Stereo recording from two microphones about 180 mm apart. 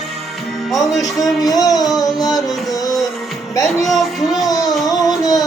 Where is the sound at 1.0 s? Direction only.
20° left (ahead or behind).